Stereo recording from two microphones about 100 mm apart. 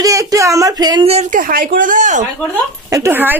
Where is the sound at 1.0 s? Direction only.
90° right.